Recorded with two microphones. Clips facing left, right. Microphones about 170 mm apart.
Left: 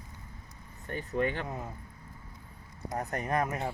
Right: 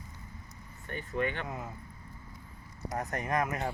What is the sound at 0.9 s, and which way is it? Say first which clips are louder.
Speech: left 2 dB; 35° left (ahead or behind).